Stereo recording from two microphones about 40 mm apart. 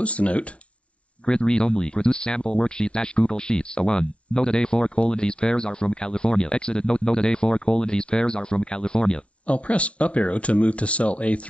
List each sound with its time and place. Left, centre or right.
0.0 s speech: left
1.2 s speech: left